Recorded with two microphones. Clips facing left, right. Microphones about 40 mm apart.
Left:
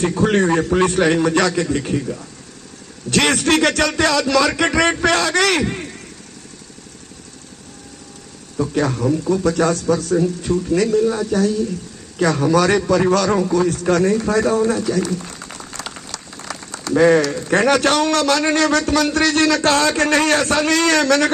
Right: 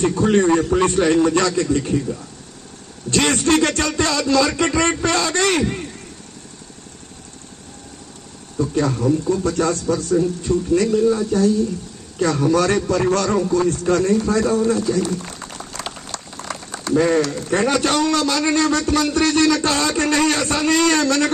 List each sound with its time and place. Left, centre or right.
0.2 s a man's voice: left
3.1 s speech: left
8.5 s speech: left
10.5 s speech: centre
11.1 s a man's voice: left
12.2 s speech: left
14.2 s a man's voice: left
14.7 s speech: left
16.1 s a sound: centre
16.9 s a man's voice: left
17.6 s a man's voice: left